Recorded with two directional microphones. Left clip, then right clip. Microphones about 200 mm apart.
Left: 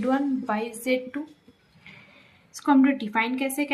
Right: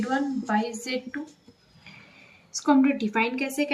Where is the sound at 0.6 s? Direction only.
55° left (ahead or behind).